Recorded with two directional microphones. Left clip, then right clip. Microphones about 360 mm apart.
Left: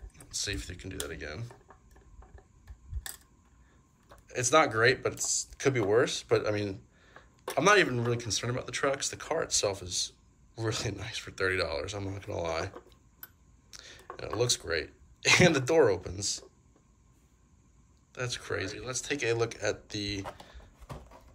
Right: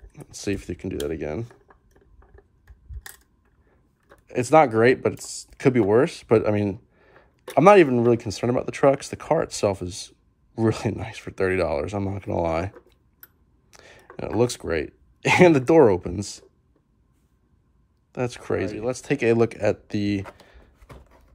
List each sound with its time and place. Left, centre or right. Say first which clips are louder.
0.1 s speech: right 6 dB; centre
4.3 s speech: right 8 dB; centre
18.1 s speech: right 8 dB; centre